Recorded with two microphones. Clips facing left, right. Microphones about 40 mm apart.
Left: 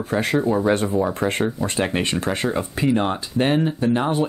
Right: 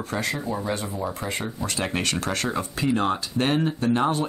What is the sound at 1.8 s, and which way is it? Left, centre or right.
Speech, centre.